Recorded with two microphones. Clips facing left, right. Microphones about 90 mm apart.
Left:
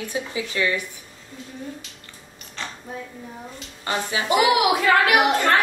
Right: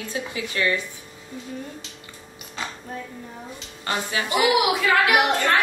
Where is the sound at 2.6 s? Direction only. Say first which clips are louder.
Right 2 dB; 10° right (ahead or behind).